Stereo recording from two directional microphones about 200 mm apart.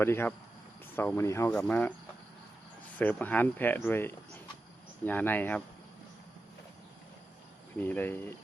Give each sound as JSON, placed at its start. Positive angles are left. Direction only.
{"t": 0.0, "sound": "speech", "side_deg": 10}
{"t": 3.0, "sound": "speech", "side_deg": 10}
{"t": 7.8, "sound": "speech", "side_deg": 10}